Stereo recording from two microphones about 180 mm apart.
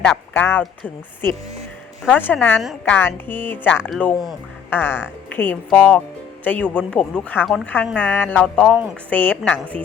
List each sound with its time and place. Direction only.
0.0 s speech: 5° left (ahead or behind)
2.0 s a woman's voice: 10° left (ahead or behind)
4.7 s a woman's voice: 10° left (ahead or behind)